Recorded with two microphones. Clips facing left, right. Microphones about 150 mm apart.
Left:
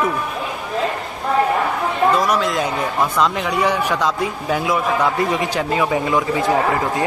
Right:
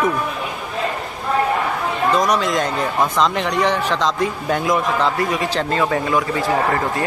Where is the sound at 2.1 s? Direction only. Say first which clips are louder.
Even; 5° left (ahead or behind).